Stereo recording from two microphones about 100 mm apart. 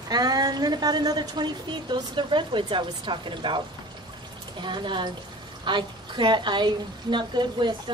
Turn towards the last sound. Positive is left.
turn(degrees=-50)  # may be behind; listen again after turning